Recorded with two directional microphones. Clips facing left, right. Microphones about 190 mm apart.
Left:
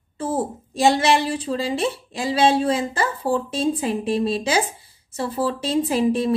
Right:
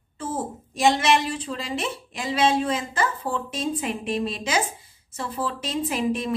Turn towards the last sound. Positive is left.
turn(degrees=30)  # may be behind; listen again after turning